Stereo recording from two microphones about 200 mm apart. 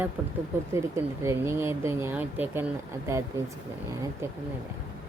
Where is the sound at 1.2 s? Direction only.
10° right (ahead or behind).